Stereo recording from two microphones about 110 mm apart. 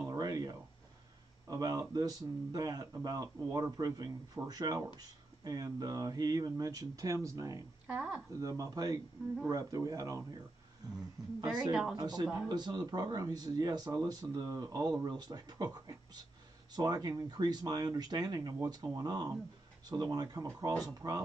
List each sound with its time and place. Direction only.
0.1 s a sound: 35° right (ahead or behind)
1.5 s speech: 35° right (ahead or behind)
7.8 s speech: 10° right (ahead or behind)
8.3 s speech: 30° right (ahead or behind)
11.2 s speech: 5° right (ahead or behind)
12.0 s speech: 40° right (ahead or behind)